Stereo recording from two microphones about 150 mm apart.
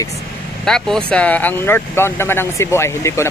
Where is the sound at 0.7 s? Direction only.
5° left (ahead or behind).